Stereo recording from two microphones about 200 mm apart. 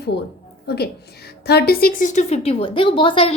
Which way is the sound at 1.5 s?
50° left (ahead or behind).